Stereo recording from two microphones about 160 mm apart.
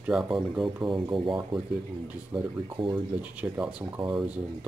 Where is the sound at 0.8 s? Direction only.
30° right (ahead or behind).